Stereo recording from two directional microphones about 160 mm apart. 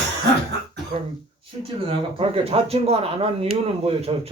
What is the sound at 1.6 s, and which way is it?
Speech, 35° right (ahead or behind).